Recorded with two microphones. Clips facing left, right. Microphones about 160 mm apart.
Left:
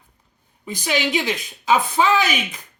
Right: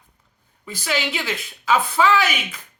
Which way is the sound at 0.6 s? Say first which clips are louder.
Left 3 dB; 20° left (ahead or behind).